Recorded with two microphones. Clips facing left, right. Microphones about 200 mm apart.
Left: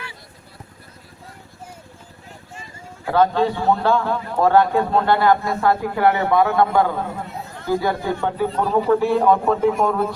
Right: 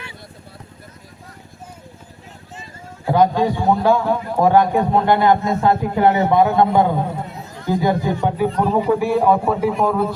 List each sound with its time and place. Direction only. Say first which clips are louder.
3.1 s a man's voice: right 2 dB; 15° right (ahead or behind)